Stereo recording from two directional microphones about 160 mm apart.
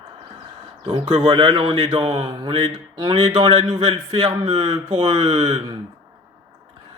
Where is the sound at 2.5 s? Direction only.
40° right (ahead or behind).